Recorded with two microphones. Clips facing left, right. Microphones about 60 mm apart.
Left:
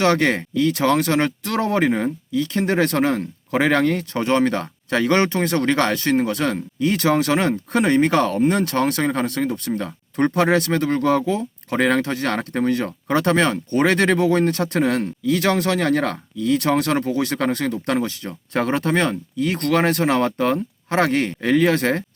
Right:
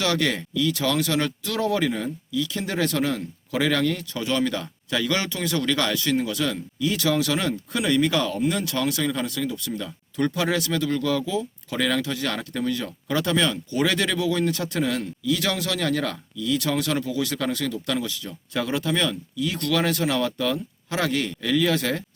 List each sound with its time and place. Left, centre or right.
0.0 s speech: left